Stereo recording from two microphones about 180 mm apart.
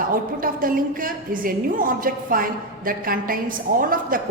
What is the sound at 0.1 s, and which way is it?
A woman's voice, 50° right (ahead or behind).